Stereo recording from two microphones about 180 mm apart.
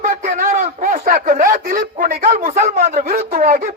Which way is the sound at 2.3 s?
40° right (ahead or behind).